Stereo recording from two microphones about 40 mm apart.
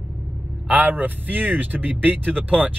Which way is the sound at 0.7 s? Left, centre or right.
Right.